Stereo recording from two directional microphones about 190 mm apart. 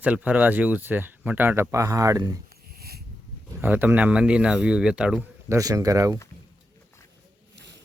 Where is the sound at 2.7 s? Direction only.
55° right (ahead or behind).